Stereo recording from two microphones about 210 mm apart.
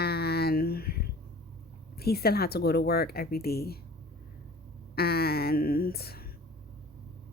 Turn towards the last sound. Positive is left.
turn(degrees=45)  # may be behind; listen again after turning